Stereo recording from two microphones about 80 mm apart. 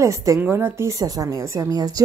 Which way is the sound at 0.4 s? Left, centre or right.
Right.